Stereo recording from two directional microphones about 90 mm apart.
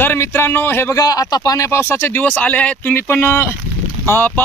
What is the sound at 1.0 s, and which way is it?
Speech, 45° left (ahead or behind).